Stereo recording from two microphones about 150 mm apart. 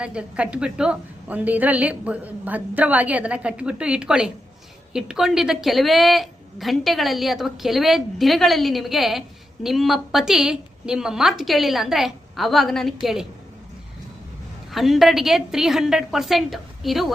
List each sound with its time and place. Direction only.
0.0 s a woman's voice: 5° right (ahead or behind)
14.7 s a woman's voice: centre (ahead or behind)